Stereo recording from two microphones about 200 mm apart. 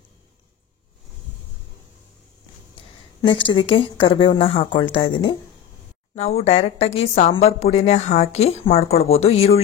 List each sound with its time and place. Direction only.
3.2 s speech: 25° left (ahead or behind)
6.1 s a woman's voice: 35° left (ahead or behind)